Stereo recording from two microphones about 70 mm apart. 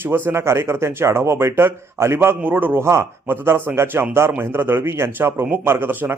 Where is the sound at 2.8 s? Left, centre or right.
Right.